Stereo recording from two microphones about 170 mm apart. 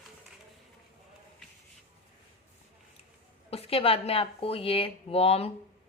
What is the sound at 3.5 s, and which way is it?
Speech, 35° left (ahead or behind).